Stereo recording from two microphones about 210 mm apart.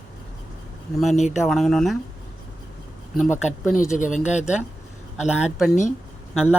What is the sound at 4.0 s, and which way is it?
Speech, 35° left (ahead or behind).